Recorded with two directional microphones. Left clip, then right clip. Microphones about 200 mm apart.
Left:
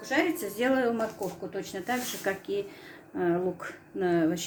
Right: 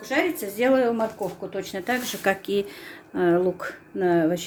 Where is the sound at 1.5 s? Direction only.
35° right (ahead or behind).